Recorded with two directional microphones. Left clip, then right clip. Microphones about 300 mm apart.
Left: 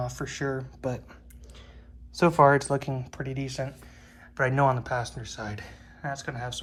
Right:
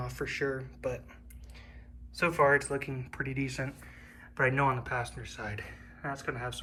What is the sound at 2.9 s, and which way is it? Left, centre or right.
Speech, centre.